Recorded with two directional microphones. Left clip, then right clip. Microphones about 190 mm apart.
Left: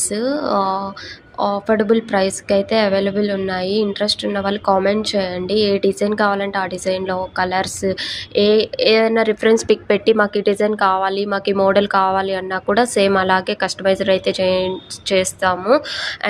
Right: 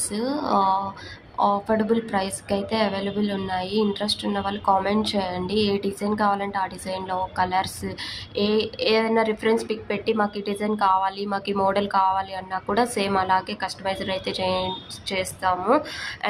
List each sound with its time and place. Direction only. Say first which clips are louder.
0.1 s a woman's voice: left 4 dB; 20° left (ahead or behind)